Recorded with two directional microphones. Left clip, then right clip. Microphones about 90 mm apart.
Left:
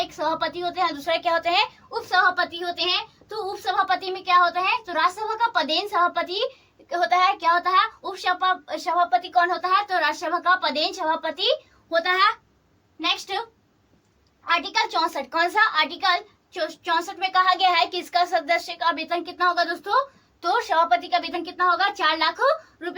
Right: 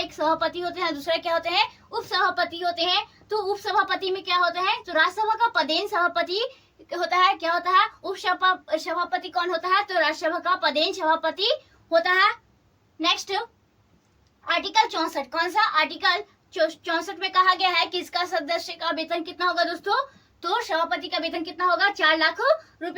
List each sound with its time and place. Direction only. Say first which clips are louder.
0.1 s a woman's voice: right 1 dB; 25° left (ahead or behind); by 1.6 s 50° left (ahead or behind)
1.9 s a woman's voice: left 4 dB; 30° left (ahead or behind)
6.9 s a woman's voice: left 1 dB; 40° left (ahead or behind)
9.0 s speech: left 6 dB; 60° left (ahead or behind)
9.4 s a woman's voice: even; 35° left (ahead or behind)
14.4 s a woman's voice: right 1 dB; 40° left (ahead or behind)
15.1 s speech: left 2 dB; 60° left (ahead or behind)
15.7 s a child's voice: left 1 dB; 35° left (ahead or behind)
18.9 s a woman's voice: left 2 dB; 35° left (ahead or behind)
20.4 s a child's voice: left 4 dB; 45° left (ahead or behind)